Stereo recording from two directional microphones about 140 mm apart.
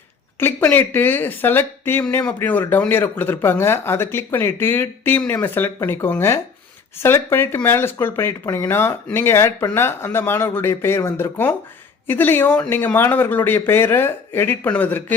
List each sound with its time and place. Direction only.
0.3 s speech: 15° left (ahead or behind)